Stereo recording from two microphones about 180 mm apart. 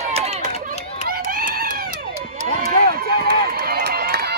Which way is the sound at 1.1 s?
55° right (ahead or behind).